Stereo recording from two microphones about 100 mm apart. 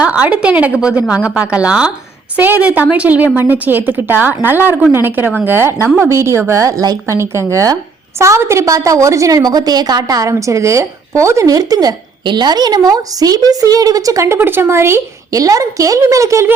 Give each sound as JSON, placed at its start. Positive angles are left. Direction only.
{"t": 0.0, "sound": "a woman's voice", "side_deg": -10}
{"t": 14.3, "sound": "a woman's voice", "side_deg": -20}